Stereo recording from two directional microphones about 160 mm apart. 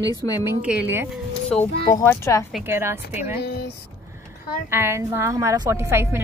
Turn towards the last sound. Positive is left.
turn(degrees=-15)  # may be behind; listen again after turning